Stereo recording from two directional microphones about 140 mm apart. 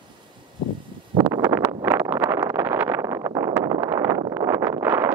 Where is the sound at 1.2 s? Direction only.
20° right (ahead or behind).